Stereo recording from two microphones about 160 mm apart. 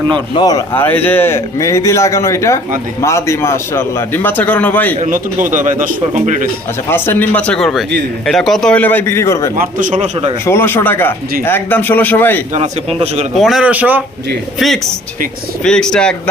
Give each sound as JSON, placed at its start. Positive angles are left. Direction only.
{"t": 0.3, "sound": "a man's voice", "side_deg": 25}
{"t": 0.8, "sound": "a man's voice", "side_deg": 15}
{"t": 4.9, "sound": "a man's voice", "side_deg": -55}
{"t": 6.9, "sound": "a man's voice", "side_deg": 15}
{"t": 9.6, "sound": "a man's voice", "side_deg": -55}
{"t": 10.4, "sound": "a man's voice", "side_deg": 15}
{"t": 12.5, "sound": "a man's voice", "side_deg": -40}
{"t": 13.3, "sound": "speech", "side_deg": 0}
{"t": 15.6, "sound": "speech", "side_deg": 5}